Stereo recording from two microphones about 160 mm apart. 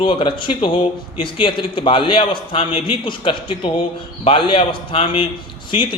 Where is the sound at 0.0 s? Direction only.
35° left (ahead or behind).